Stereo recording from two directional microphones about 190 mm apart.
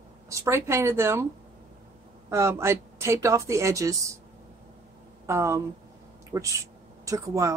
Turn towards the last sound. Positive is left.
turn(degrees=-15)  # may be behind; listen again after turning